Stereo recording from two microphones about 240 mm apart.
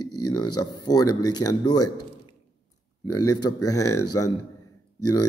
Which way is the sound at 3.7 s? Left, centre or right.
Centre.